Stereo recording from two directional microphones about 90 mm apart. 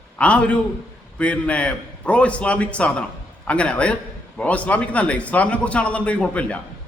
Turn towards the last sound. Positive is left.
turn(degrees=10)  # may be behind; listen again after turning